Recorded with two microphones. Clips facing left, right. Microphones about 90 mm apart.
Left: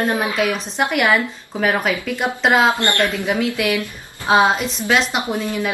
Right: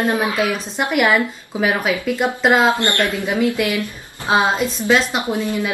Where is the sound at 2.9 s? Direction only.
15° right (ahead or behind).